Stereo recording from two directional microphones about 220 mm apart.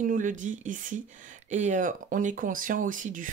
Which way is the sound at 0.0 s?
35° right (ahead or behind).